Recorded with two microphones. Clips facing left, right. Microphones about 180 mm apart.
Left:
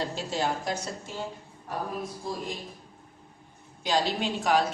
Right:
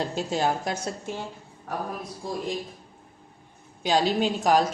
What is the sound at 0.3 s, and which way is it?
Speech, 55° right (ahead or behind).